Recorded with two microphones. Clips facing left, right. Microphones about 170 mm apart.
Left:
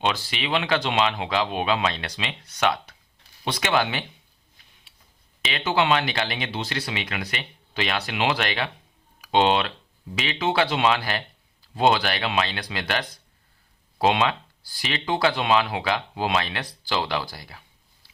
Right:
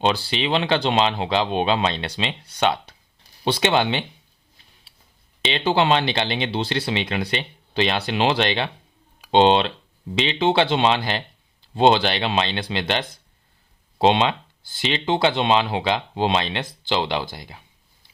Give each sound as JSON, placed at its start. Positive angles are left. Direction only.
{"t": 0.0, "sound": "speech", "side_deg": -30}
{"t": 5.4, "sound": "speech", "side_deg": -25}